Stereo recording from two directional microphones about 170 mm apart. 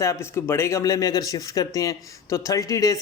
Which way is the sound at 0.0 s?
15° left (ahead or behind).